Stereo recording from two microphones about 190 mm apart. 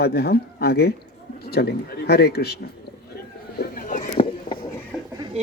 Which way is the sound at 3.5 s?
50° left (ahead or behind).